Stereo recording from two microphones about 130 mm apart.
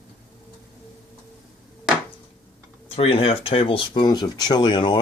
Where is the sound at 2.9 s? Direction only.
50° left (ahead or behind).